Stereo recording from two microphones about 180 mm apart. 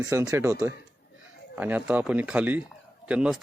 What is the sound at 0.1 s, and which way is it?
Speech, 15° right (ahead or behind).